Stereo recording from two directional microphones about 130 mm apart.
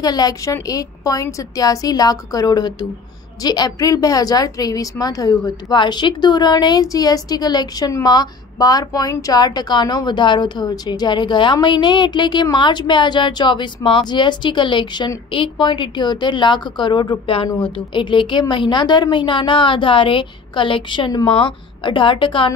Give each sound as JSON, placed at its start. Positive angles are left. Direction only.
{"t": 0.0, "sound": "a woman's voice", "side_deg": 30}